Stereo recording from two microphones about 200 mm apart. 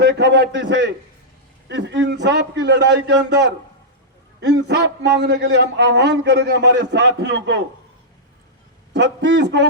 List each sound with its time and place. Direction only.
0.0 s a man's voice: 55° right (ahead or behind)
8.9 s a man's voice: 60° right (ahead or behind)